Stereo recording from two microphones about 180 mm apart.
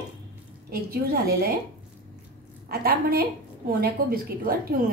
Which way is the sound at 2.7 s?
55° right (ahead or behind).